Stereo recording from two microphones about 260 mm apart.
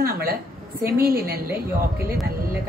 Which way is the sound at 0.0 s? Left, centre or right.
Right.